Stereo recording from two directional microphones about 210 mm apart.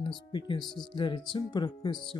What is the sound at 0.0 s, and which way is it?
Speech, 25° left (ahead or behind).